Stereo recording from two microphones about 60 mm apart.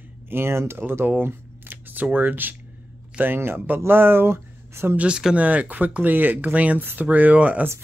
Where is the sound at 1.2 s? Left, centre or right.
Right.